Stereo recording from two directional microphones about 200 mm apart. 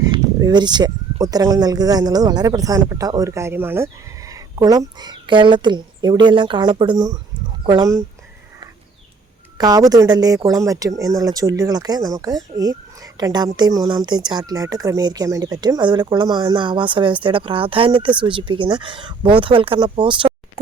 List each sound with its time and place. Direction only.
0.1 s speech: 20° right (ahead or behind)
9.6 s speech: 20° right (ahead or behind)